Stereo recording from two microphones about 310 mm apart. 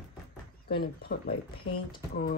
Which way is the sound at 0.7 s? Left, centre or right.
Left.